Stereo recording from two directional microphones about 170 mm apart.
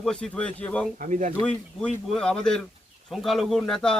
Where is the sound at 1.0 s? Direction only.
50° right (ahead or behind).